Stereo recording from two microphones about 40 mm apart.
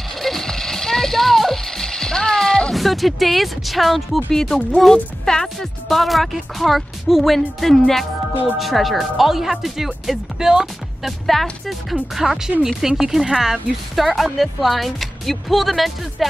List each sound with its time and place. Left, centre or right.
0.2 s music: centre
2.7 s a woman's voice: centre
4.3 s a woman's voice: centre
11.1 s a woman's voice: centre